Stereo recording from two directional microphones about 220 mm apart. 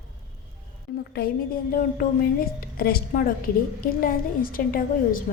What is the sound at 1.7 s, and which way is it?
A woman's voice, 40° left (ahead or behind).